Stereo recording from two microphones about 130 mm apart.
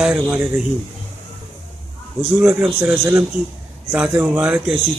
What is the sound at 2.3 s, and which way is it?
Speech, 10° right (ahead or behind).